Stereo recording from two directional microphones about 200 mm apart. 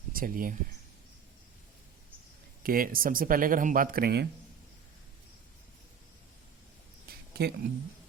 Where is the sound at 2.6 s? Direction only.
45° right (ahead or behind).